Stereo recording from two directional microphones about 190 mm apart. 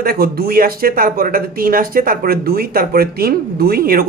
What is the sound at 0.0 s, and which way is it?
Speech, 55° right (ahead or behind).